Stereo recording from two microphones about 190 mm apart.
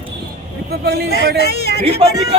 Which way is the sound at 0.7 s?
55° right (ahead or behind).